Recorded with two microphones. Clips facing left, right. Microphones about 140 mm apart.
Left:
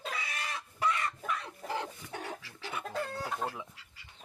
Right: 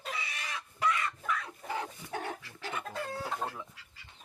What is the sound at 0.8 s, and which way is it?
Chicken, 30° left (ahead or behind).